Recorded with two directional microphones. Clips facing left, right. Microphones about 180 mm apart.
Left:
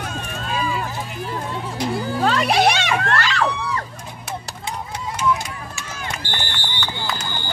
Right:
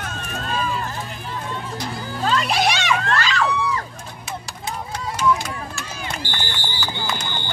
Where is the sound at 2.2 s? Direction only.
60° left (ahead or behind).